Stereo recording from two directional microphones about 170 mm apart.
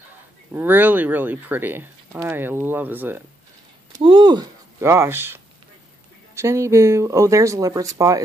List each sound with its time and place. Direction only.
0.5 s speech: 10° right (ahead or behind)
4.0 s speech: 30° right (ahead or behind)